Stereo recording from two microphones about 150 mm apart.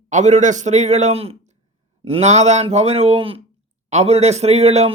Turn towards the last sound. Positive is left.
turn(degrees=-45)  # may be behind; listen again after turning